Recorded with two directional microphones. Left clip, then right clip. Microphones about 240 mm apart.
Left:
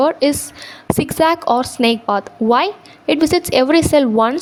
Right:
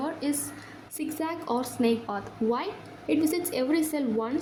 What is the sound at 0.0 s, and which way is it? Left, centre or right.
A woman's voice, left.